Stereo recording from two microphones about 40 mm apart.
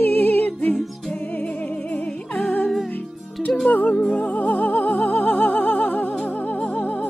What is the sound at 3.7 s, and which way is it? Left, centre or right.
Music, left.